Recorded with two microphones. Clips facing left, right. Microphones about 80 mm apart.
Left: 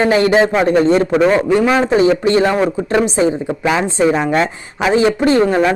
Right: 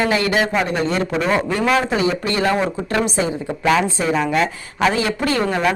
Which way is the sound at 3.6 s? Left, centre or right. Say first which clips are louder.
Right 2 dB; centre.